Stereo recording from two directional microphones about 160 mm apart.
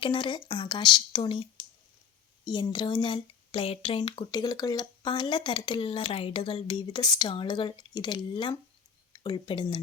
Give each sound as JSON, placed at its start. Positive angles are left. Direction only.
{"t": 0.0, "sound": "speech", "side_deg": 30}